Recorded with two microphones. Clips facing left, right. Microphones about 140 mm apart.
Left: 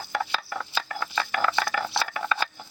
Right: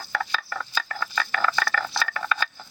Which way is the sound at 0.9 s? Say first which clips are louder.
Even; 15° left (ahead or behind).